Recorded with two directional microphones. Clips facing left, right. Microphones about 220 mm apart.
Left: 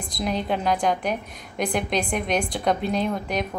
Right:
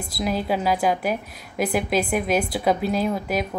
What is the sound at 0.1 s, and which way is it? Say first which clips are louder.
A woman's voice: right 2 dB; 5° right (ahead or behind).